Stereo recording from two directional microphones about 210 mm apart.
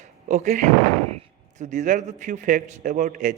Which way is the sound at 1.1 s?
30° right (ahead or behind).